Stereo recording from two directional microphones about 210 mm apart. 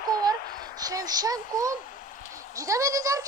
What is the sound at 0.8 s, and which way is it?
Speech, 15° right (ahead or behind).